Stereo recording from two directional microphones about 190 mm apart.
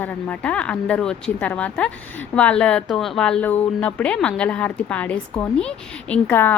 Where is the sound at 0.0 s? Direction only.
5° left (ahead or behind).